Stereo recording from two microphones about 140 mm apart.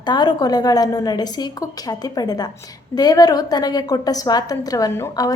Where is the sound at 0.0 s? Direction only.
30° left (ahead or behind).